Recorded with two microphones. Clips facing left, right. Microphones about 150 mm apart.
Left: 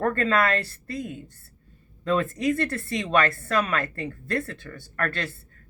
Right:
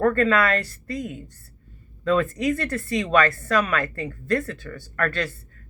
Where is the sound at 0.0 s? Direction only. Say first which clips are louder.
Right 5 dB; 25° left (ahead or behind).